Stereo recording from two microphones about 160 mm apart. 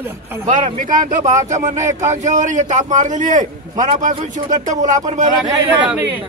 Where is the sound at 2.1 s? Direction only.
50° right (ahead or behind).